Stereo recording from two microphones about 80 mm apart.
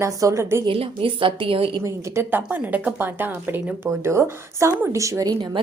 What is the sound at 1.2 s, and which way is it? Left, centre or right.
Speech, right.